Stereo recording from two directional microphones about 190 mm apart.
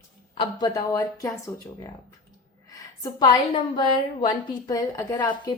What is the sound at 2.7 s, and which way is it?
A woman's voice, 20° left (ahead or behind).